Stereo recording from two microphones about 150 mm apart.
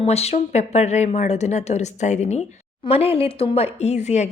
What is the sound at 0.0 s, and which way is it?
A woman's voice, 45° left (ahead or behind).